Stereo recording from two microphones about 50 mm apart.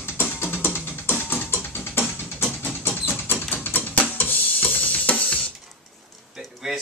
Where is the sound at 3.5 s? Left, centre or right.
Left.